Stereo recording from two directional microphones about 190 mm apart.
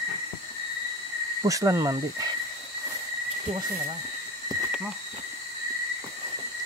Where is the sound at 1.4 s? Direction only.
20° right (ahead or behind).